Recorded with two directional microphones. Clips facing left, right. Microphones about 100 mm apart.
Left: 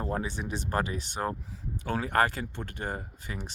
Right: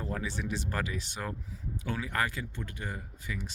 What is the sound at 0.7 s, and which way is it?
Speech, 40° left (ahead or behind).